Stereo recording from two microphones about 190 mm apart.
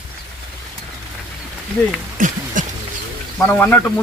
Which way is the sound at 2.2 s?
45° right (ahead or behind).